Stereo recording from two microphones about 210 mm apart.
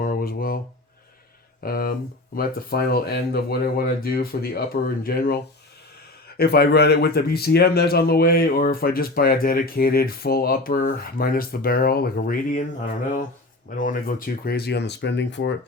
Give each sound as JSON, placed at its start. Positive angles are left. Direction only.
{"t": 0.0, "sound": "a sound", "side_deg": 45}
{"t": 1.6, "sound": "speech", "side_deg": 45}
{"t": 13.7, "sound": "speech", "side_deg": 40}